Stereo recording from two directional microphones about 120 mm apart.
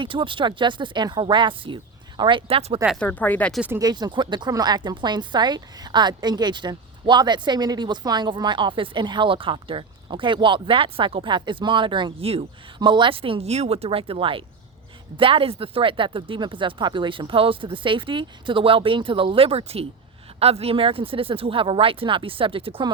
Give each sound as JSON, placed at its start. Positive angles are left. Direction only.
{"t": 0.0, "sound": "speech", "side_deg": -45}
{"t": 3.0, "sound": "speech", "side_deg": 15}
{"t": 3.8, "sound": "a woman's voice", "side_deg": -35}